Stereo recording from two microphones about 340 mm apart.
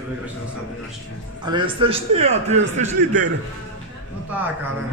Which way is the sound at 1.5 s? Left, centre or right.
Centre.